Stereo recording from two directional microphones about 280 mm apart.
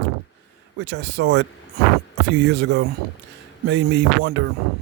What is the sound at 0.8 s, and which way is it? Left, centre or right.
Speech, right.